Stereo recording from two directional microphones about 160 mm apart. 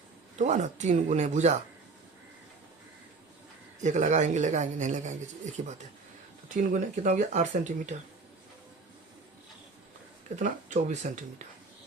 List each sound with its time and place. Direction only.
0.3 s speech: 50° right (ahead or behind)
3.8 s speech: 50° right (ahead or behind)
10.3 s speech: 50° right (ahead or behind)